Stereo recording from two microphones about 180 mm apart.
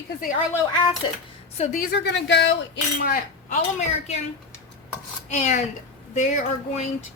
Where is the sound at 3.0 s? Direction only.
55° left (ahead or behind).